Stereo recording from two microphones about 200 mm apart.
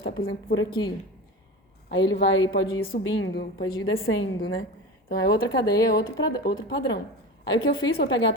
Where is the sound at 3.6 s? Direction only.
20° left (ahead or behind).